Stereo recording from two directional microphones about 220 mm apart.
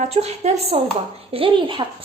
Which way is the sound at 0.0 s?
30° right (ahead or behind).